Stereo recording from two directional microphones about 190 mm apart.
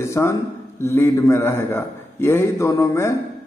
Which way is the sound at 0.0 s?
15° left (ahead or behind).